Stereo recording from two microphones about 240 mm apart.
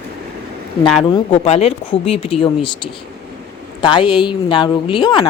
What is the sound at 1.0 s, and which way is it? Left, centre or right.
A woman's voice, centre.